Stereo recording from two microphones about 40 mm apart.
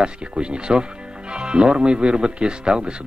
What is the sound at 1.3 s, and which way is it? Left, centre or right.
Speech, right.